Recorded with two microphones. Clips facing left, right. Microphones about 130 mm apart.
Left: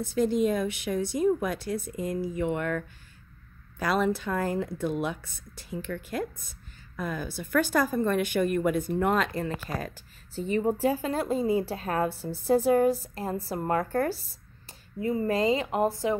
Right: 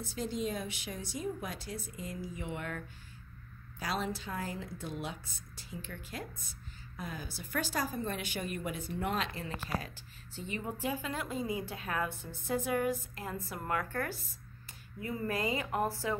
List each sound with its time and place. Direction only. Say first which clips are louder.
0.0 s speech: left 11 dB; 55° left (ahead or behind)
3.8 s a woman's voice: left 10 dB; 60° left (ahead or behind); by 16.2 s 20° left (ahead or behind)